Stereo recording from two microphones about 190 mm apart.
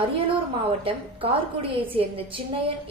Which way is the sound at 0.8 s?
30° right (ahead or behind).